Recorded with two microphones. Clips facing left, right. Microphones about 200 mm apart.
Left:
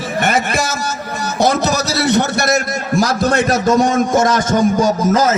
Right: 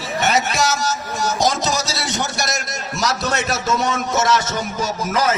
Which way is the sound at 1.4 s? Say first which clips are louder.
Left 7 dB; 60° left (ahead or behind).